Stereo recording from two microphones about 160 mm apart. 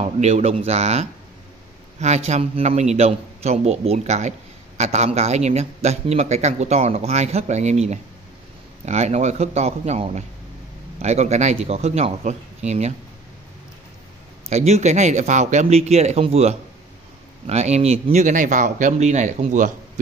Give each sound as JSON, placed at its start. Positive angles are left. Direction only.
{"t": 0.0, "sound": "a man's voice", "side_deg": -40}
{"t": 14.5, "sound": "a man's voice", "side_deg": -45}